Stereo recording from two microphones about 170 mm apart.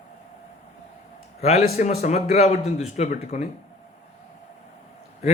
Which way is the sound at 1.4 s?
40° left (ahead or behind).